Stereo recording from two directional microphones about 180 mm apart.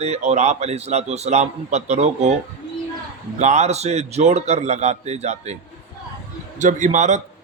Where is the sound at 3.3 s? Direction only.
40° right (ahead or behind).